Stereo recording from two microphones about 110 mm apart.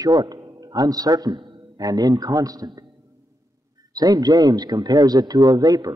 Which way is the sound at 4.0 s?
35° right (ahead or behind).